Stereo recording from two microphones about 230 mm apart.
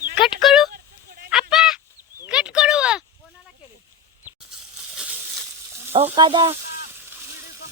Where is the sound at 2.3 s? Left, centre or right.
Centre.